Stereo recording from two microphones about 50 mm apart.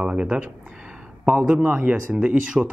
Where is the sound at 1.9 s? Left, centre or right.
Right.